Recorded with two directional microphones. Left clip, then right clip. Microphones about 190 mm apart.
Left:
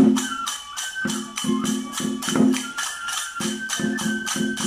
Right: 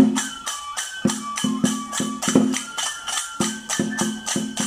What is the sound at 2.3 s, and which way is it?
Music, 40° right (ahead or behind).